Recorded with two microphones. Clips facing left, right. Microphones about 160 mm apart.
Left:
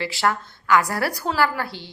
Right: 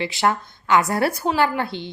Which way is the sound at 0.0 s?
20° right (ahead or behind).